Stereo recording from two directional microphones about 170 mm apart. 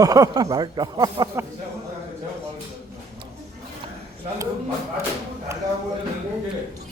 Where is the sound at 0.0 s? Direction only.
20° right (ahead or behind).